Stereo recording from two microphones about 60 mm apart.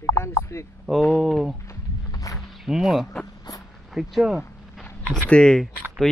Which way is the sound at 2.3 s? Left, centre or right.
Centre.